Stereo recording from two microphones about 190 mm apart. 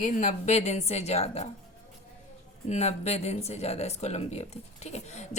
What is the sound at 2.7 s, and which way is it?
Speech, 35° left (ahead or behind).